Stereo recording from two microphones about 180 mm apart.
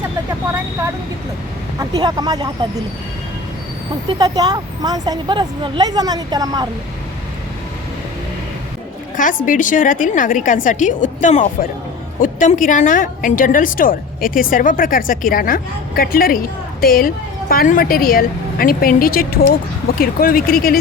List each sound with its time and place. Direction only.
1.8 s a woman's voice: 20° right (ahead or behind)
4.1 s a woman's voice: 20° right (ahead or behind)
9.1 s a woman's voice: 45° left (ahead or behind)